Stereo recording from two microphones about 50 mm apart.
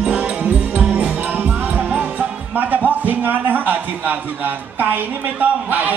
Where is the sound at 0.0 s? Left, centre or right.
Right.